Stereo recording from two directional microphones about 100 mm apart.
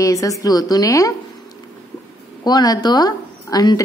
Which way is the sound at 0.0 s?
35° left (ahead or behind).